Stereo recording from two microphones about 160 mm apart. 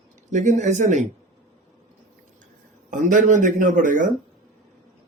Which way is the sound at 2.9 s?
55° right (ahead or behind).